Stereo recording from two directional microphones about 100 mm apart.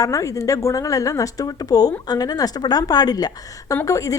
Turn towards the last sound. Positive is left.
turn(degrees=35)  # may be behind; listen again after turning